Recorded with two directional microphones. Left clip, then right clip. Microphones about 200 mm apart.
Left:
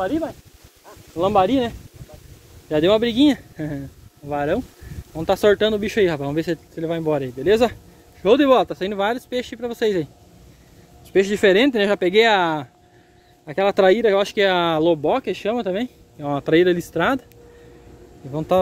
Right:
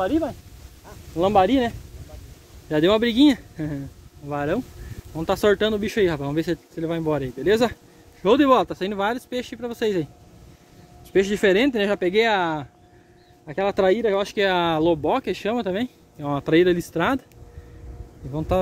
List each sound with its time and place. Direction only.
0.0 s speech: 5° right (ahead or behind)
2.7 s speech: 5° right (ahead or behind)
11.1 s speech: 5° left (ahead or behind); by 14.3 s 30° left (ahead or behind)
14.3 s speech: 15° left (ahead or behind)
18.3 s speech: 10° left (ahead or behind)